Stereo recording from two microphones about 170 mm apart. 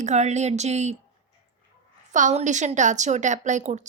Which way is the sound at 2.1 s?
45° right (ahead or behind).